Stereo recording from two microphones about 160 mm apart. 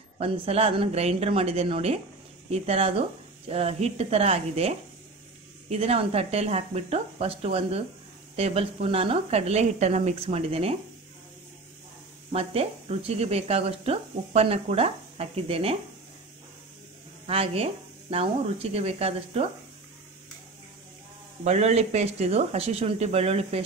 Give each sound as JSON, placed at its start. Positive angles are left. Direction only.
{"t": 0.2, "sound": "speech", "side_deg": -40}
{"t": 12.3, "sound": "speech", "side_deg": -40}
{"t": 17.3, "sound": "speech", "side_deg": -35}
{"t": 21.5, "sound": "speech", "side_deg": -45}